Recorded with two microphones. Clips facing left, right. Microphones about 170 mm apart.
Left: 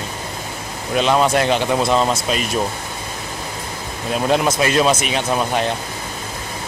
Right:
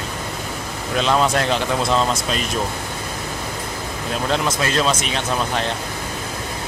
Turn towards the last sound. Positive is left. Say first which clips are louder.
# left 4 dB
turn(degrees=10)  # may be behind; listen again after turning